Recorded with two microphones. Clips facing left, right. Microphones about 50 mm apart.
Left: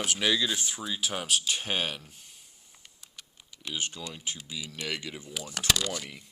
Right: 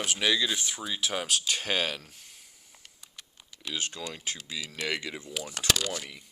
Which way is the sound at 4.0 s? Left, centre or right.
Right.